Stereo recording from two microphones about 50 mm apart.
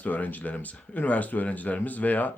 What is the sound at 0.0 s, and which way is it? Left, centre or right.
Speech, left.